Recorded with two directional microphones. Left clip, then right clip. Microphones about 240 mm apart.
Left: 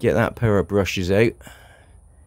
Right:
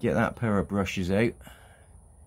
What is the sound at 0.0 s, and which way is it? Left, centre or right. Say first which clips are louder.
Speech: left 7 dB; left.